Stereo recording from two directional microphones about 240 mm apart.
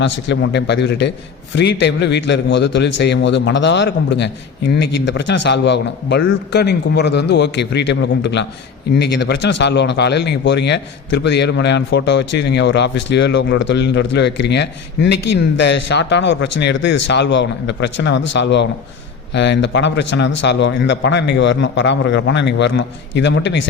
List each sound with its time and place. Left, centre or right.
0.0 s speech: left